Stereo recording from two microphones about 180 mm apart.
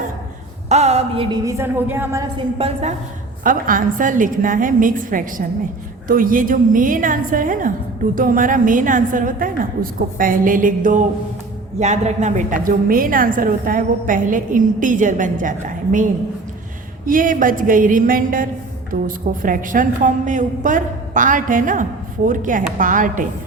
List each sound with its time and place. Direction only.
0.7 s a sound: 35° right (ahead or behind)
1.5 s a woman's voice: 15° right (ahead or behind)
2.6 s speech: 35° right (ahead or behind)
3.4 s a woman's voice: 50° right (ahead or behind)
17.1 s a woman's voice: 50° right (ahead or behind)